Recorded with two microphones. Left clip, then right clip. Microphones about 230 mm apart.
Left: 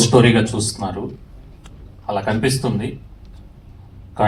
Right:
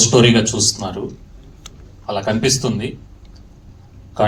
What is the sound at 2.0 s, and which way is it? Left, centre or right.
Speech, right.